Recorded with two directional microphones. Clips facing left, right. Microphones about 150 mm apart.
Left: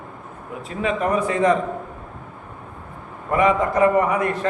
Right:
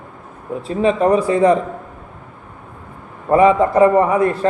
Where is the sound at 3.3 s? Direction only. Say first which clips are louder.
Right 6 dB; 30° right (ahead or behind).